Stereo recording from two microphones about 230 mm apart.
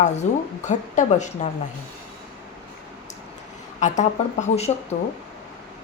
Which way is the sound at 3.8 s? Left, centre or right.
Left.